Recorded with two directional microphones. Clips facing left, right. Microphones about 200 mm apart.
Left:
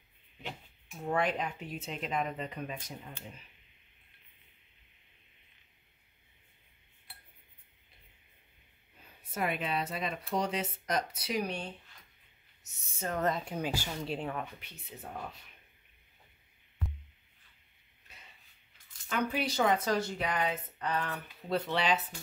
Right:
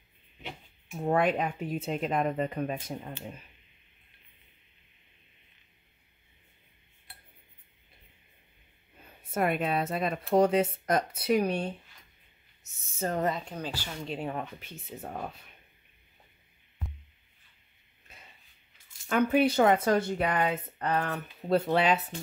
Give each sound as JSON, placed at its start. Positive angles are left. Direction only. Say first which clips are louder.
{"t": 0.9, "sound": "speech", "louder": "right 5 dB", "side_deg": -50}
{"t": 9.3, "sound": "speech", "louder": "right 6 dB", "side_deg": -50}
{"t": 12.7, "sound": "speech", "louder": "right 3 dB", "side_deg": -25}
{"t": 13.4, "sound": "speech", "louder": "left 2 dB", "side_deg": 10}
{"t": 14.6, "sound": "speech", "louder": "right 6 dB", "side_deg": -45}
{"t": 19.0, "sound": "speech", "louder": "right 9 dB", "side_deg": -55}